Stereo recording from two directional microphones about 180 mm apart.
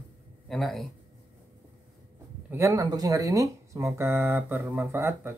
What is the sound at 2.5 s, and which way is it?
Speech, 15° right (ahead or behind).